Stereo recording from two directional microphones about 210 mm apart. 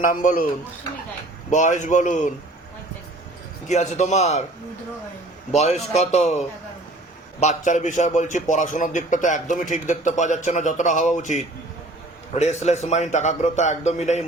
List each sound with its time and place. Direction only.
0.0 s a man's voice: 40° left (ahead or behind)
1.5 s a man's voice: 35° left (ahead or behind)
3.7 s a man's voice: 35° left (ahead or behind)
5.5 s a man's voice: 30° left (ahead or behind)